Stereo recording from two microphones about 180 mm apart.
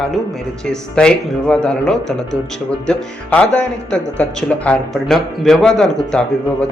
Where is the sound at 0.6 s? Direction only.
5° left (ahead or behind).